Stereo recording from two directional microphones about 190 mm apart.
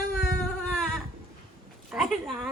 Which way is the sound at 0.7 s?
5° left (ahead or behind).